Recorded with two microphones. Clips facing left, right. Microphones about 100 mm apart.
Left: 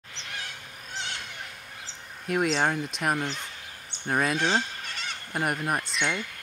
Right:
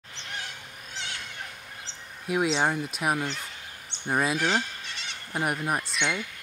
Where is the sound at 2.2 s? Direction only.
Centre (ahead or behind).